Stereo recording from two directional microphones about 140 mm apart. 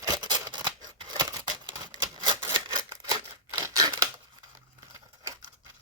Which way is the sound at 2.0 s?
35° right (ahead or behind).